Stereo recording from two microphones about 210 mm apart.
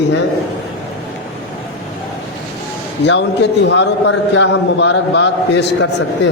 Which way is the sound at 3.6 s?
60° left (ahead or behind).